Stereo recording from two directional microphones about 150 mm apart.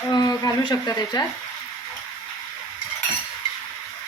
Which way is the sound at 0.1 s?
25° left (ahead or behind).